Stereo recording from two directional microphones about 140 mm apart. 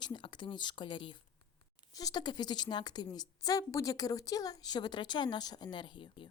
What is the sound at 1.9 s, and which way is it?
A woman's voice, 25° left (ahead or behind).